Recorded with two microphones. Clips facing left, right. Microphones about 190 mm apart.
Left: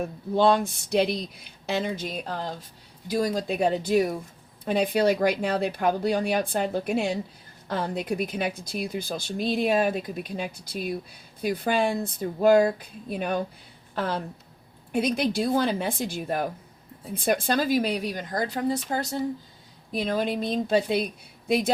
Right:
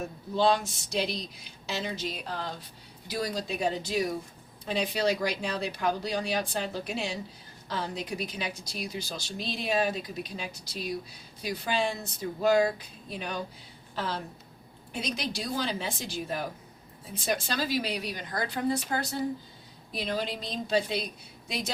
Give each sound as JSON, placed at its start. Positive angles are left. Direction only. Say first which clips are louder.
{"t": 0.3, "sound": "speech", "louder": "left 4 dB", "side_deg": 55}
{"t": 19.9, "sound": "speech", "louder": "left 6 dB", "side_deg": 50}